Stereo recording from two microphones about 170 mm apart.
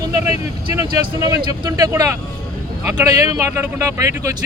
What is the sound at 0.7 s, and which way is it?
Speech, 20° right (ahead or behind).